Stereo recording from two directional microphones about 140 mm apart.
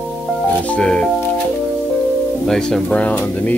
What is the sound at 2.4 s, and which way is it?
Speech, 5° left (ahead or behind).